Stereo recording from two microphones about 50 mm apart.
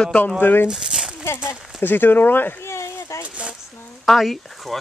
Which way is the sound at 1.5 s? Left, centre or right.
Left.